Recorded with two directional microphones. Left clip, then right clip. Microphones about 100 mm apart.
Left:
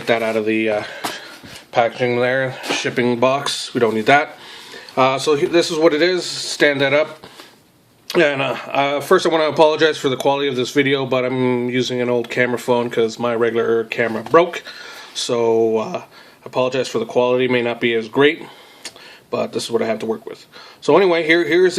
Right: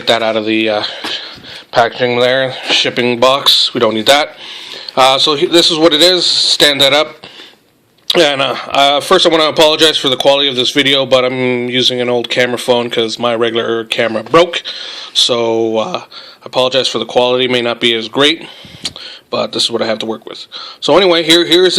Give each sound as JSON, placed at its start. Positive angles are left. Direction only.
{"t": 0.0, "sound": "a man's voice", "side_deg": -35}
{"t": 19.3, "sound": "a man's voice", "side_deg": -25}